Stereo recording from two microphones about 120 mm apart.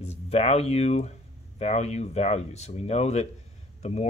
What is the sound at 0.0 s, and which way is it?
Speech, 60° left (ahead or behind).